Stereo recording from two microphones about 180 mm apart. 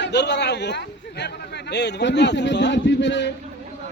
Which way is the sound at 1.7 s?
75° left (ahead or behind).